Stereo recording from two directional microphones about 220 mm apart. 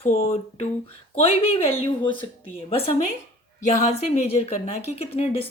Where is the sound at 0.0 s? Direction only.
25° left (ahead or behind).